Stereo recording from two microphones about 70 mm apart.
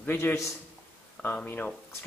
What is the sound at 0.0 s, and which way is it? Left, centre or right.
Speech, left.